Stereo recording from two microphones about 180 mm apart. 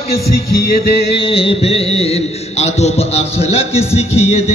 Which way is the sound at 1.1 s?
30° left (ahead or behind).